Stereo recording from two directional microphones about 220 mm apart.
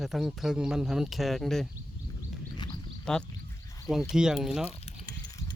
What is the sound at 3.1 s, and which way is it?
Speech, 5° left (ahead or behind).